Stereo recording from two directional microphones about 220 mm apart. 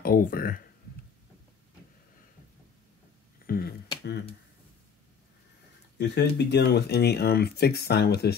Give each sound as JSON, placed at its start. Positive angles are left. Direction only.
{"t": 0.0, "sound": "speech", "side_deg": 40}
{"t": 3.4, "sound": "a sound", "side_deg": 45}
{"t": 5.9, "sound": "speech", "side_deg": 50}